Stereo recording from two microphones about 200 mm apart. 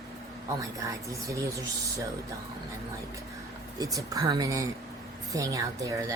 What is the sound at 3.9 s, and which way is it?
A woman's voice, 20° right (ahead or behind).